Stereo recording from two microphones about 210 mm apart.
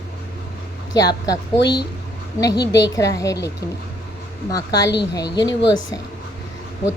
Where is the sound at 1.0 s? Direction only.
20° left (ahead or behind).